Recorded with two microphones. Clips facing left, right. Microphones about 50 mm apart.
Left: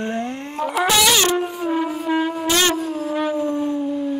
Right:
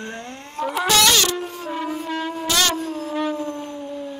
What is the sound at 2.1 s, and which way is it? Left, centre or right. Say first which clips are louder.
Shofar: left 6 dB; centre.